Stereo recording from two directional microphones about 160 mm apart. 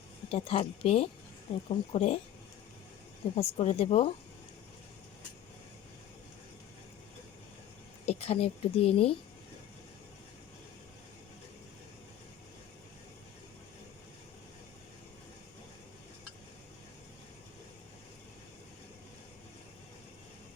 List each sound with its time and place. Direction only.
0.3 s a woman's voice: 40° left (ahead or behind)
3.3 s a woman's voice: 40° left (ahead or behind)
8.0 s a woman's voice: 40° left (ahead or behind)